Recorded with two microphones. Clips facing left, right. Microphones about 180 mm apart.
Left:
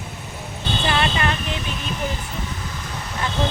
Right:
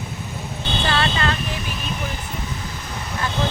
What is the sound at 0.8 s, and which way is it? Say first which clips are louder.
Vehicle: even; 20° left (ahead or behind).